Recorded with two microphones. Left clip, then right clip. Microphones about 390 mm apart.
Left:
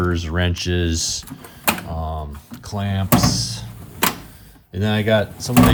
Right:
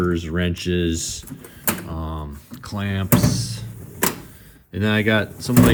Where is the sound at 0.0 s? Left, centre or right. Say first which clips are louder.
Left 1 dB; centre.